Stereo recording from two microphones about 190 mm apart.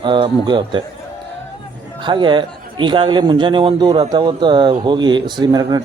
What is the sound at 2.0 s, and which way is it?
A man's voice, 25° right (ahead or behind).